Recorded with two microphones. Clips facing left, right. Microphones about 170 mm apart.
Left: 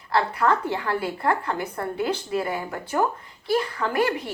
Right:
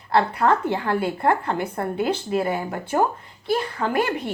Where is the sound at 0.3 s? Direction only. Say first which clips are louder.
Right 2 dB; 20° right (ahead or behind).